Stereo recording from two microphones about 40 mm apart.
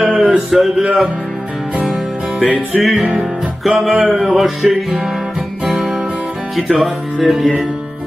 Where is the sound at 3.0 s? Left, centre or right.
Right.